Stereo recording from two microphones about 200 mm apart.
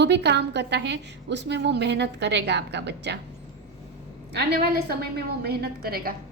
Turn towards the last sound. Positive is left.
turn(degrees=-50)  # may be behind; listen again after turning